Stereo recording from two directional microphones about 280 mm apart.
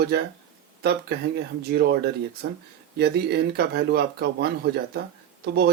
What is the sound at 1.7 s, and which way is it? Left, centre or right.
A man's voice, right.